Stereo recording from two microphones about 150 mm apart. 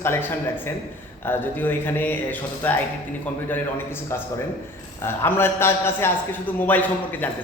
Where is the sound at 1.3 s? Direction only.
15° left (ahead or behind).